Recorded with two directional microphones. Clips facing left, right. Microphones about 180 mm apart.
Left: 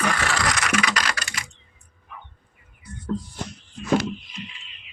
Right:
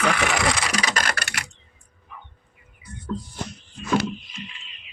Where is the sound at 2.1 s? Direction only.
65° left (ahead or behind).